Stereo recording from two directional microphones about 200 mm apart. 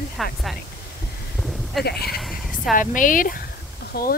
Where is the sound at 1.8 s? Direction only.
50° left (ahead or behind).